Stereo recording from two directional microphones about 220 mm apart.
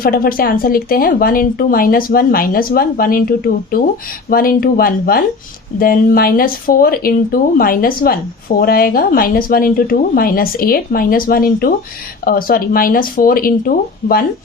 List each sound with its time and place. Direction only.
0.0 s speech: 40° left (ahead or behind)